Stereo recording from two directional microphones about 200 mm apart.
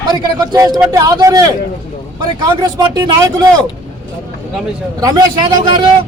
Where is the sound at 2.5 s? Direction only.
20° right (ahead or behind).